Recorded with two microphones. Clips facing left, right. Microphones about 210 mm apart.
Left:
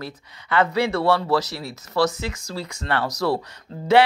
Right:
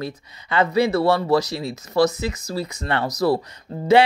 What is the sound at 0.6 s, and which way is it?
Speech, 10° right (ahead or behind).